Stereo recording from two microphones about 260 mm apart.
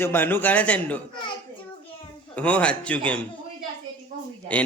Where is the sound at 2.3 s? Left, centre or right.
Centre.